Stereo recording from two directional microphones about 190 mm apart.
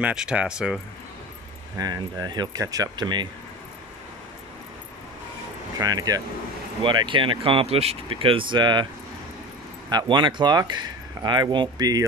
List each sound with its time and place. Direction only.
0.0 s speech: 5° right (ahead or behind)
1.8 s speech: 20° right (ahead or behind)
5.8 s speech: 20° right (ahead or behind)
9.8 s speech: 25° right (ahead or behind)